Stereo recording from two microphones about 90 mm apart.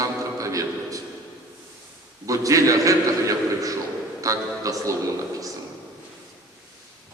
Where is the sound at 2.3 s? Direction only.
40° right (ahead or behind).